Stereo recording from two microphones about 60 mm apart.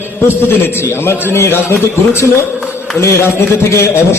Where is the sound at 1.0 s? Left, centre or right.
Left.